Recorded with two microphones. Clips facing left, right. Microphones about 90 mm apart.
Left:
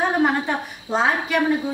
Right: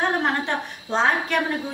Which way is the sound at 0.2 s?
10° left (ahead or behind).